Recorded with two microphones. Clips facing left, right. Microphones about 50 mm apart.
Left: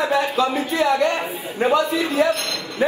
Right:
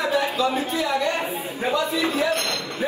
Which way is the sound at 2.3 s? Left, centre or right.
Right.